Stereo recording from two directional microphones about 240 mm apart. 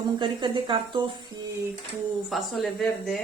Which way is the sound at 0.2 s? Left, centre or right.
Centre.